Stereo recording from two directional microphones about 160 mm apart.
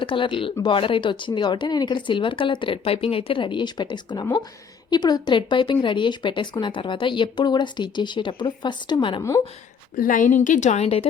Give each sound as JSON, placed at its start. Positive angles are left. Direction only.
{"t": 0.0, "sound": "speech", "side_deg": 30}
{"t": 9.9, "sound": "a woman's voice", "side_deg": 55}